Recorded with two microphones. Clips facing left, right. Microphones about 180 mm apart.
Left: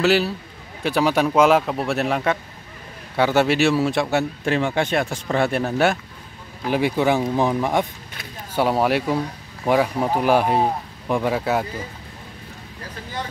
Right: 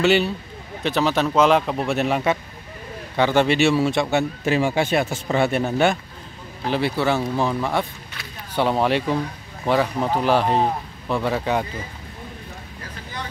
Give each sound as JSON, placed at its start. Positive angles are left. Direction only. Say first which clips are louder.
{"t": 0.0, "sound": "a man's voice", "louder": "even", "side_deg": 0}
{"t": 6.7, "sound": "speech", "louder": "left 2 dB", "side_deg": 15}